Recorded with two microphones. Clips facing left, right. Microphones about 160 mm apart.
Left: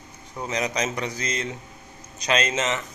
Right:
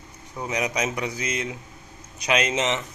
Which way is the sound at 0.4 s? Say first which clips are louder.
Even; 10° right (ahead or behind).